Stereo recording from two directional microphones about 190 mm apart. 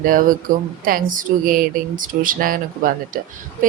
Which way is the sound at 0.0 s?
45° right (ahead or behind).